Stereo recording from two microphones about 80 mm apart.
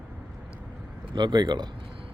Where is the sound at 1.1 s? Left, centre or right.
Right.